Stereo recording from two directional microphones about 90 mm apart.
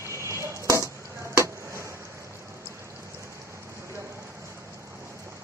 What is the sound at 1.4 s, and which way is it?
Chop, 35° right (ahead or behind).